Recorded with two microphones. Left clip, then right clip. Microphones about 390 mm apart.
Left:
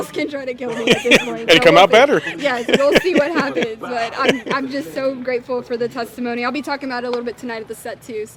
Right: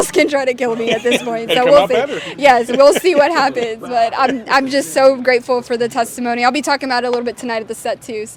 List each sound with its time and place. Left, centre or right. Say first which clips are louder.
0.1 s speech: right 10 dB; right
0.9 s speech: left 5 dB; left
1.5 s speech: left 1 dB; left
2.4 s speech: right 10 dB; right
3.0 s speech: right 5 dB; centre
4.4 s a woman's voice: right 8 dB; right